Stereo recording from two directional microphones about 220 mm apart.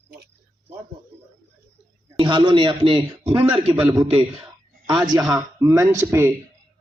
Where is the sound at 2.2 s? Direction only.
20° right (ahead or behind).